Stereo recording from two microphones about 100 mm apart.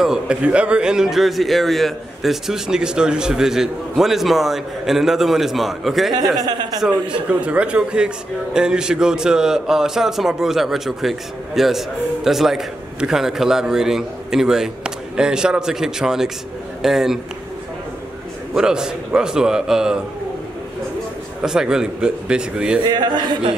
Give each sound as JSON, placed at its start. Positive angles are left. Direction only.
{"t": 0.0, "sound": "a man's voice", "side_deg": -5}
{"t": 6.4, "sound": "a man's voice", "side_deg": -40}
{"t": 6.8, "sound": "a man's voice", "side_deg": -10}
{"t": 18.5, "sound": "a man's voice", "side_deg": -5}
{"t": 21.4, "sound": "a man's voice", "side_deg": -5}
{"t": 22.8, "sound": "a man's voice", "side_deg": -45}